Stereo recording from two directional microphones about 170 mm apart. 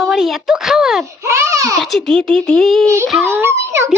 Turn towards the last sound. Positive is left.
turn(degrees=-15)  # may be behind; listen again after turning